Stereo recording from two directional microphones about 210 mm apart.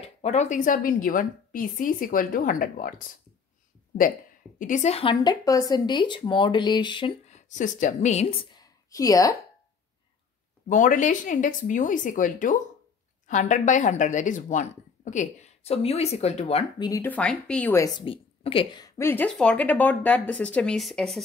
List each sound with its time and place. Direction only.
0.0 s a woman's voice: 30° left (ahead or behind)
4.6 s speech: 35° left (ahead or behind); by 9.4 s 15° left (ahead or behind)
10.7 s a woman's voice: 40° left (ahead or behind); by 21.2 s centre (ahead or behind)